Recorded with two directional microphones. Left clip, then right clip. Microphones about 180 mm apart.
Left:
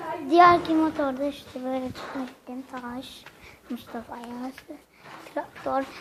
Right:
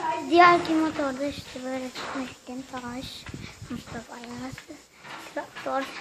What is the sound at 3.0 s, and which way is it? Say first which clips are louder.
A child's voice: right 3 dB; 10° left (ahead or behind).